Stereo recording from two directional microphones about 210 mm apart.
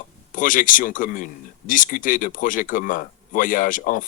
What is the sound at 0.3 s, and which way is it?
A man's voice, 40° left (ahead or behind).